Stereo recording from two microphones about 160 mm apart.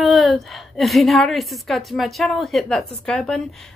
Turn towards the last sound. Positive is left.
turn(degrees=0)  # may be behind; listen again after turning